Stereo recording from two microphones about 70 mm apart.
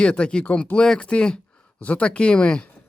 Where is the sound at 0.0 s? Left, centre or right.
Centre.